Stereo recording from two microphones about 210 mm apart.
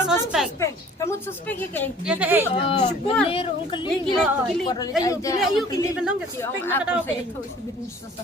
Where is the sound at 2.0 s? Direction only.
5° right (ahead or behind).